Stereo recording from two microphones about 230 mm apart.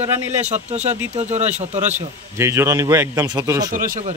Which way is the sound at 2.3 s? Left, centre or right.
Centre.